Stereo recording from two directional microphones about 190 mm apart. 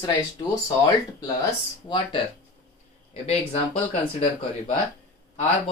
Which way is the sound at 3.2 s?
30° left (ahead or behind).